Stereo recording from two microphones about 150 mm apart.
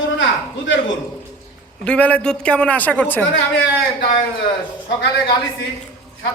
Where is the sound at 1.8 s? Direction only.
10° left (ahead or behind).